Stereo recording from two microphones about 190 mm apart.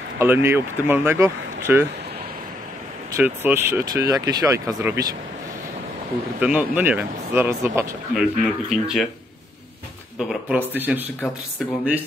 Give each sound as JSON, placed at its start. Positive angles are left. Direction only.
{"t": 0.2, "sound": "speech", "side_deg": -10}
{"t": 3.2, "sound": "speech", "side_deg": -10}
{"t": 6.4, "sound": "speech", "side_deg": -5}
{"t": 8.1, "sound": "speech", "side_deg": -5}
{"t": 10.1, "sound": "speech", "side_deg": -10}